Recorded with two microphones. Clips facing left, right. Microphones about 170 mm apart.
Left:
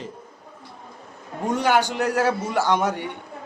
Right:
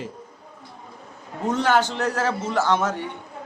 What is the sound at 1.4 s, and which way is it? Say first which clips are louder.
A man's voice: even; 10° left (ahead or behind).